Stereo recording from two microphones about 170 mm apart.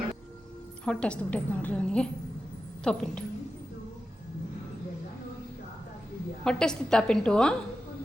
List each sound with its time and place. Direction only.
0.9 s a woman's voice: 5° left (ahead or behind)
6.4 s a woman's voice: 5° left (ahead or behind)